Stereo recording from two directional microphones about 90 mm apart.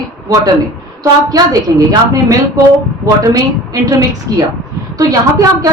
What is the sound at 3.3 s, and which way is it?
Speech, 45° right (ahead or behind).